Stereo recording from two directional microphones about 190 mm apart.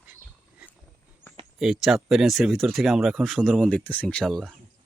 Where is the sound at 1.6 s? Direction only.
Centre (ahead or behind).